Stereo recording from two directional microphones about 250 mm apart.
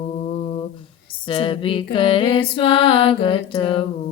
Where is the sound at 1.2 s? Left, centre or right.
Left.